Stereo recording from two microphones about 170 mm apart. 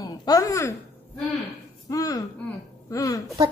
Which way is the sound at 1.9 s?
20° left (ahead or behind).